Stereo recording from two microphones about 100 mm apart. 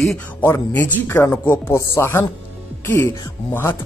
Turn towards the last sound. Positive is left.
turn(degrees=25)  # may be behind; listen again after turning